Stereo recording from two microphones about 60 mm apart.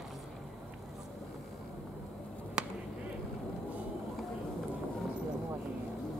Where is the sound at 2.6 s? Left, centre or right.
Centre.